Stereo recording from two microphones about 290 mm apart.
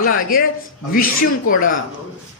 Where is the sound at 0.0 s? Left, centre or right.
Left.